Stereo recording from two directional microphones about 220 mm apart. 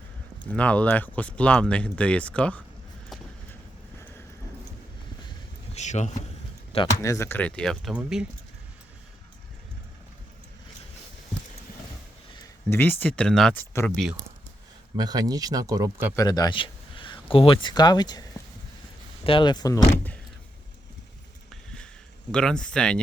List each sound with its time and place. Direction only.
0.5 s speech: 5° left (ahead or behind)
5.7 s speech: 30° left (ahead or behind)
6.7 s speech: 15° left (ahead or behind); by 8.3 s 5° right (ahead or behind)
12.3 s speech: 15° left (ahead or behind)
14.9 s speech: 15° right (ahead or behind)
16.1 s speech: 15° left (ahead or behind)
21.5 s a sound: 5° left (ahead or behind)
22.3 s speech: 5° left (ahead or behind)